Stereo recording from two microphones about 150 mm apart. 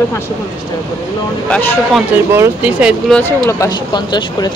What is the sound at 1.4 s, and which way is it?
Speech, 10° left (ahead or behind).